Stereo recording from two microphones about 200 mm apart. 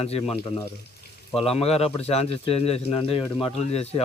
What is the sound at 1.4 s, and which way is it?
Speech, 30° left (ahead or behind).